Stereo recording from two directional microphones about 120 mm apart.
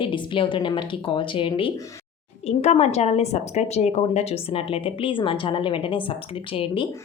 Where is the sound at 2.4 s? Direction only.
65° left (ahead or behind).